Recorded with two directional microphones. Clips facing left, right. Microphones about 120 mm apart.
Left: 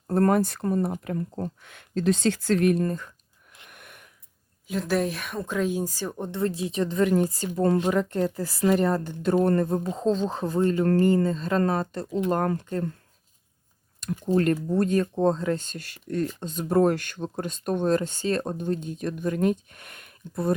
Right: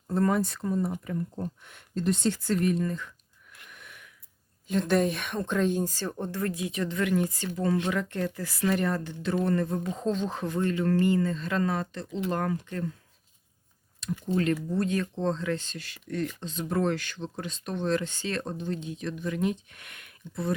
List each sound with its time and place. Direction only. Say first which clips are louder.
0.1 s speech: left 4 dB; 55° left (ahead or behind)
2.8 s speech: left 3 dB; 45° left (ahead or behind)
3.7 s gasp: left 1 dB; 55° left (ahead or behind)
4.7 s speech: right 1 dB; 5° left (ahead or behind); by 9.0 s 35° left (ahead or behind)
9.0 s speech: left 5 dB; 45° left (ahead or behind)
14.0 s speech: left 5 dB; 45° left (ahead or behind)